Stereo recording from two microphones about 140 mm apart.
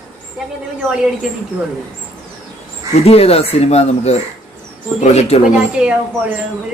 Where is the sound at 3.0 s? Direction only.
45° left (ahead or behind).